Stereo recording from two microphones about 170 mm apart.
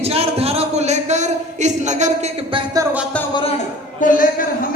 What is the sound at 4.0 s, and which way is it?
Speech, 55° left (ahead or behind).